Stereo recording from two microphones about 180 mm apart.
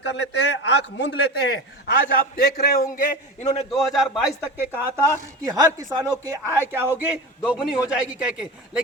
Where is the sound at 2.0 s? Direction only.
50° left (ahead or behind).